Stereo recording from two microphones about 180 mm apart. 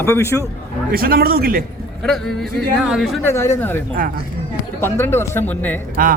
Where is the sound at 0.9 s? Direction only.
55° right (ahead or behind).